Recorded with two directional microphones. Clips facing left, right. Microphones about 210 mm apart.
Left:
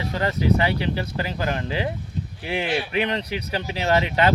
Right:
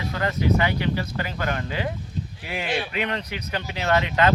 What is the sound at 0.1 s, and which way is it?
Speech, 30° left (ahead or behind).